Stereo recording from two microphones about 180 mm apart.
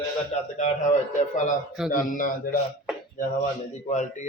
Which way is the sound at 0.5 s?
40° left (ahead or behind).